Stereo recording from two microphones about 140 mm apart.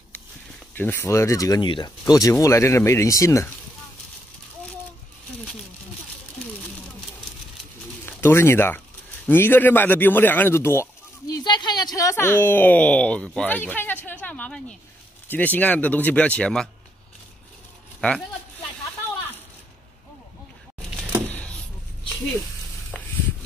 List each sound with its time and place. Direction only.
0.7 s speech: 15° left (ahead or behind)
1.6 s speech: 35° left (ahead or behind)
8.0 s speech: 15° left (ahead or behind)
14.0 s a sound: 10° left (ahead or behind)
15.2 s speech: 10° left (ahead or behind)
18.0 s speech: 10° left (ahead or behind)
21.3 s a sound: 10° left (ahead or behind)